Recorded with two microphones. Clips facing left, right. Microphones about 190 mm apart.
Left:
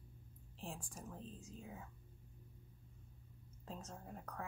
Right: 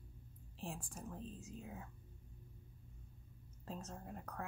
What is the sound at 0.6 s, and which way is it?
Speech, 5° right (ahead or behind).